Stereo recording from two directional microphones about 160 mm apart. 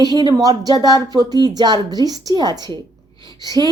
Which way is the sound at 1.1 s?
25° right (ahead or behind).